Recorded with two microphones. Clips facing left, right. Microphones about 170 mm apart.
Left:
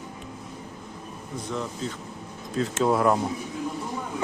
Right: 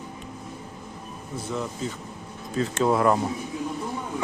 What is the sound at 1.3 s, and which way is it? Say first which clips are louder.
Speech: right 1 dB; 5° right (ahead or behind).